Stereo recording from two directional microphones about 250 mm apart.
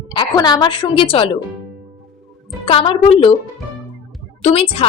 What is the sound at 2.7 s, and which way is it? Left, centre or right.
Speech, left.